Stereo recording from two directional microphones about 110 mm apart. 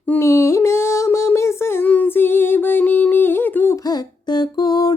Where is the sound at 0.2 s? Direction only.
25° left (ahead or behind).